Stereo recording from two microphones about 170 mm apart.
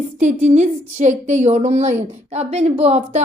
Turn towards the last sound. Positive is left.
turn(degrees=-40)  # may be behind; listen again after turning